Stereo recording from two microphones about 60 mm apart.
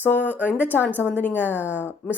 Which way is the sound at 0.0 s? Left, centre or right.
Left.